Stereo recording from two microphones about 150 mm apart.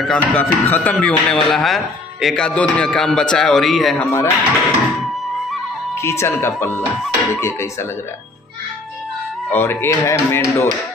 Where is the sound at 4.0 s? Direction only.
20° left (ahead or behind).